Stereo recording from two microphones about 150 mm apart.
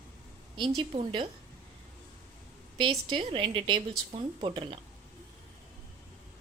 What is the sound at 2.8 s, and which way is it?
A woman's voice, 35° right (ahead or behind).